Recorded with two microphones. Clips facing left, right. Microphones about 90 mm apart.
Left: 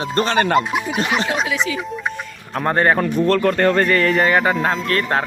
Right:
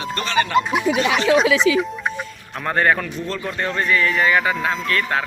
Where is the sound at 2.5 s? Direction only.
35° left (ahead or behind).